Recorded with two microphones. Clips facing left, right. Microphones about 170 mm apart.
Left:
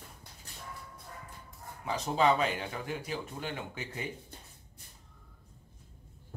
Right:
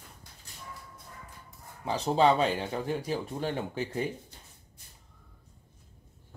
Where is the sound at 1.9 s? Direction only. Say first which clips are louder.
Right 3 dB; 35° right (ahead or behind).